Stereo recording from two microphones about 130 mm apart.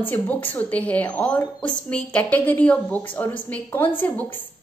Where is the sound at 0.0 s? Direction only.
15° left (ahead or behind).